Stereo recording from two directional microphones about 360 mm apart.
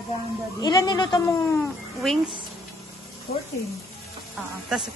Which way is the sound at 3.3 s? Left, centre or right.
Left.